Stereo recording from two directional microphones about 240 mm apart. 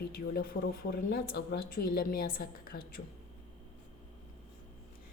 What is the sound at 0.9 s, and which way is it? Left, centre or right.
A woman's voice, left.